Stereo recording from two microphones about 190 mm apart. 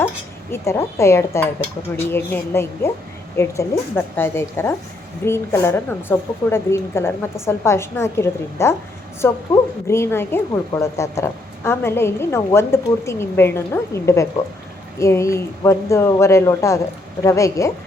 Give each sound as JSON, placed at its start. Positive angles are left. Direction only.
{"t": 0.5, "sound": "a woman's voice", "side_deg": 15}